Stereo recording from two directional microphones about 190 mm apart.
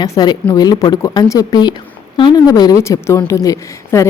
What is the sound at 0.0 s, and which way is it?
A woman's voice, 20° left (ahead or behind).